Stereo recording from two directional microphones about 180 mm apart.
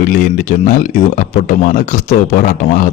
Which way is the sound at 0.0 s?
45° left (ahead or behind).